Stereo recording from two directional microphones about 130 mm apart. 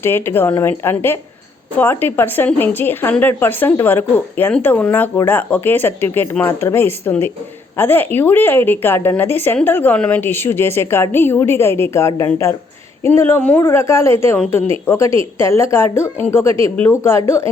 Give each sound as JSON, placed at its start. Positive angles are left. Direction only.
{"t": 0.0, "sound": "a woman's voice", "side_deg": 15}